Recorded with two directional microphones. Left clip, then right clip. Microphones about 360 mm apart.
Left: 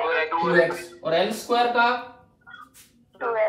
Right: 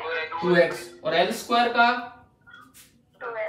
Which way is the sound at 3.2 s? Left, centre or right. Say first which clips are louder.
Left 8 dB; centre.